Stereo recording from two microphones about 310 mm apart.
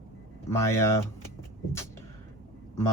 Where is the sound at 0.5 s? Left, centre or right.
Centre.